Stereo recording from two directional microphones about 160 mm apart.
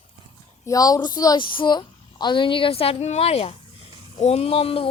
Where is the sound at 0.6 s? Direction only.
25° left (ahead or behind).